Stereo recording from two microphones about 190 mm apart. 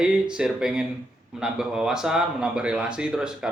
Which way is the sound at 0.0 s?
5° right (ahead or behind).